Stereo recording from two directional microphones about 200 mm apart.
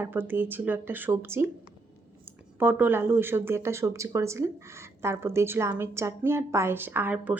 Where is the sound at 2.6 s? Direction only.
10° right (ahead or behind).